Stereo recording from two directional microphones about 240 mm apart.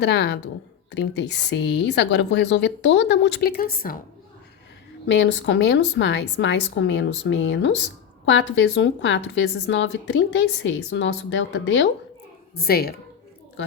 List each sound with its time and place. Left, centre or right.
0.0 s a woman's voice: left
5.0 s a woman's voice: left